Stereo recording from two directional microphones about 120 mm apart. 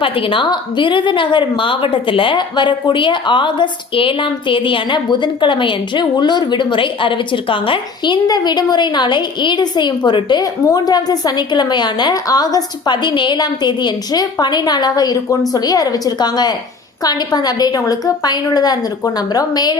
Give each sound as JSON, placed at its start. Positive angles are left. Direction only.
{"t": 0.0, "sound": "a woman's voice", "side_deg": 45}